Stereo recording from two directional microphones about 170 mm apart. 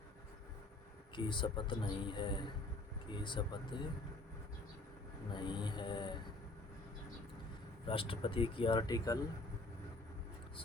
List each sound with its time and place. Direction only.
1.1 s speech: 30° left (ahead or behind)
5.3 s speech: 25° left (ahead or behind)
7.9 s speech: 30° left (ahead or behind)